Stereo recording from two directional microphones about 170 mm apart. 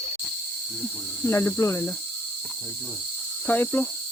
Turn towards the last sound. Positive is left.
turn(degrees=10)  # may be behind; listen again after turning